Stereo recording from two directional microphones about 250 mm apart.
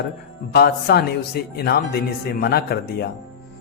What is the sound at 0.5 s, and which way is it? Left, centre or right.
Speech, left.